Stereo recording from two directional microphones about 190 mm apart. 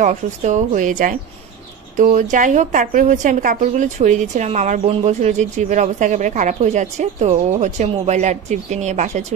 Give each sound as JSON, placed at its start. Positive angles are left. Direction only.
{"t": 0.0, "sound": "a woman's voice", "side_deg": -40}